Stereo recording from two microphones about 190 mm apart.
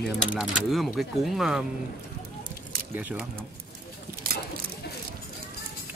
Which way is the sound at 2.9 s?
10° right (ahead or behind).